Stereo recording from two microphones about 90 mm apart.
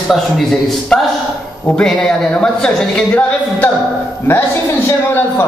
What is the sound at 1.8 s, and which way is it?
Speech, 5° left (ahead or behind).